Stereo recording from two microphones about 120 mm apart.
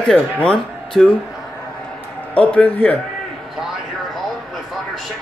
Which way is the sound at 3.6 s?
Centre (ahead or behind).